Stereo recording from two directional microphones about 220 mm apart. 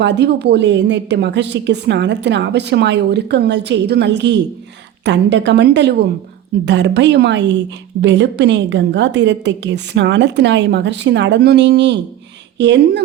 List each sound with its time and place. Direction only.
0.0 s a woman's voice: 50° right (ahead or behind)